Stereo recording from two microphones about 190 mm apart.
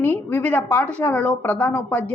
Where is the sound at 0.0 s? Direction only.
10° left (ahead or behind).